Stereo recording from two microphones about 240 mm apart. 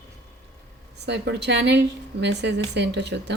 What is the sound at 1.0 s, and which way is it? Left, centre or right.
Speech, right.